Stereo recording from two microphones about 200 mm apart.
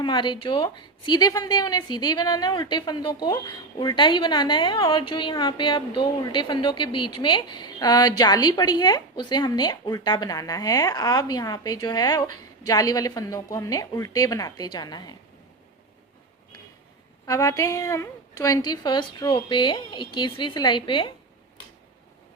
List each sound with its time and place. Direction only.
0.0 s a woman's voice: 25° left (ahead or behind)
17.2 s a woman's voice: 15° left (ahead or behind)